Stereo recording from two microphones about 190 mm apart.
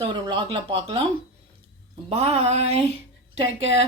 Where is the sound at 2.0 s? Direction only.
35° right (ahead or behind).